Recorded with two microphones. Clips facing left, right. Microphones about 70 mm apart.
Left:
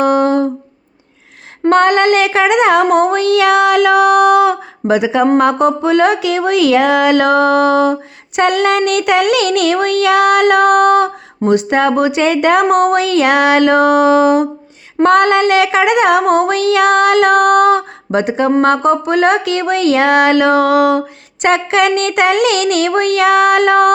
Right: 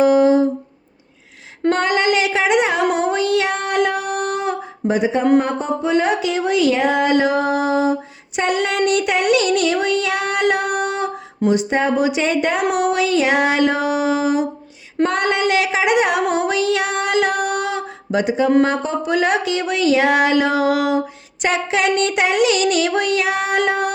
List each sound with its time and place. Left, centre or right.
0.0 s humming: left
1.7 s child singing: left
2.9 s a sound: left
5.4 s speech: left
8.4 s child singing: left
12.7 s child singing: left